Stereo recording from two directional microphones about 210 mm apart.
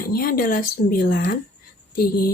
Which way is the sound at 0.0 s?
45° left (ahead or behind).